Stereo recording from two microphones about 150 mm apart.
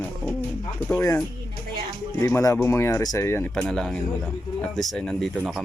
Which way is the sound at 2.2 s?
20° left (ahead or behind).